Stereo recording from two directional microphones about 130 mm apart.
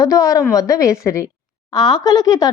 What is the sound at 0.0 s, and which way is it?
A child's voice, 25° left (ahead or behind).